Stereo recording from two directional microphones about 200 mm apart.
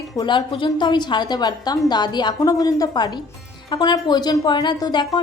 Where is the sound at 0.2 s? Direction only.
25° left (ahead or behind).